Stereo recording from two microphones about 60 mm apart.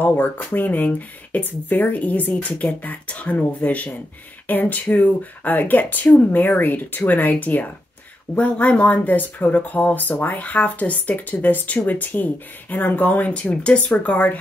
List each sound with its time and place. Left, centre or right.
0.6 s a woman's voice: left